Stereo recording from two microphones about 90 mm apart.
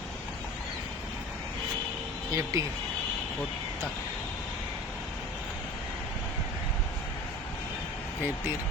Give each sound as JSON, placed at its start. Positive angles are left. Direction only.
{"t": 2.3, "sound": "speech", "side_deg": -35}